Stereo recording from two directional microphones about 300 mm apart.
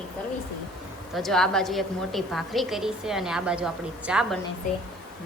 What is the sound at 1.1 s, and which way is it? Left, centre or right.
A woman's voice, centre.